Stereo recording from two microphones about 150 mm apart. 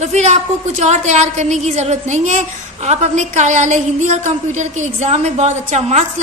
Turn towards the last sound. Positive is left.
turn(degrees=-50)  # may be behind; listen again after turning